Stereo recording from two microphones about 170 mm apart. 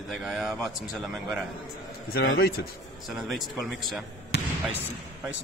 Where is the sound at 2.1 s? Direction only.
65° left (ahead or behind).